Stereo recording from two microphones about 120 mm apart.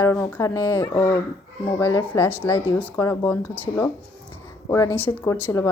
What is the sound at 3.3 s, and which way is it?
Speech, 15° left (ahead or behind).